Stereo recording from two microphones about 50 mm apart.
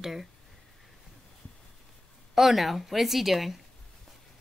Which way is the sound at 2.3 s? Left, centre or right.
Centre.